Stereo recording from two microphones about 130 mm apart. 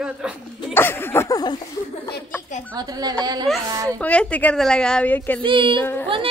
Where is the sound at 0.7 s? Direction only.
15° left (ahead or behind).